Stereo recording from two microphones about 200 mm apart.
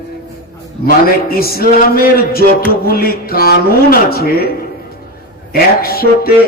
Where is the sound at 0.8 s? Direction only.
50° left (ahead or behind).